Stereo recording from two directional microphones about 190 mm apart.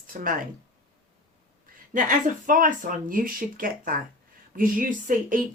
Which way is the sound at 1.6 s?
45° right (ahead or behind).